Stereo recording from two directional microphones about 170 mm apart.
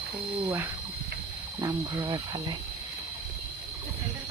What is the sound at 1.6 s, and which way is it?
Speech, 20° right (ahead or behind).